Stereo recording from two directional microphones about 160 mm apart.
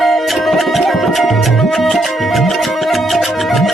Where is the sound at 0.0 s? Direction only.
Centre (ahead or behind).